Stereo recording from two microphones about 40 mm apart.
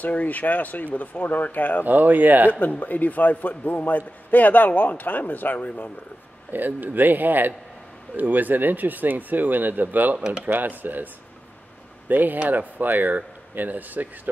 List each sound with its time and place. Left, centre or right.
0.0 s speech: left
1.9 s speech: right
2.8 s speech: left
6.5 s speech: right
10.1 s speech: centre
10.4 s speech: right
12.1 s speech: right